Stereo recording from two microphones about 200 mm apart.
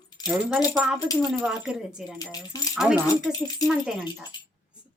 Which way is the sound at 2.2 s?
20° left (ahead or behind).